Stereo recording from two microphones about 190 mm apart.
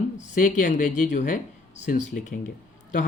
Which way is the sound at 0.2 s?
40° left (ahead or behind).